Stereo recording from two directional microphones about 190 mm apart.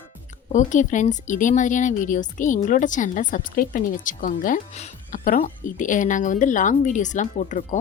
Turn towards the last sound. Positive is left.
turn(degrees=40)  # may be behind; listen again after turning